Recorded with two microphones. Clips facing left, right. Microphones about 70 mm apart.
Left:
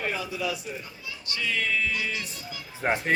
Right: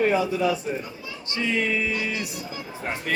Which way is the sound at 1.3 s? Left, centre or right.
Right.